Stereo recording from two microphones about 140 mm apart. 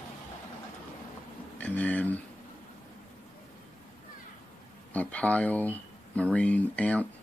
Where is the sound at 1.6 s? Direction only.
10° left (ahead or behind).